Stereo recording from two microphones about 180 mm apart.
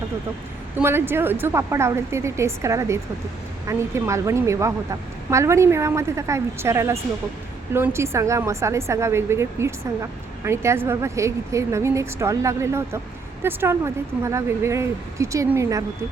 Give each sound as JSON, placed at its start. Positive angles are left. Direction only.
{"t": 0.8, "sound": "a woman's voice", "side_deg": -10}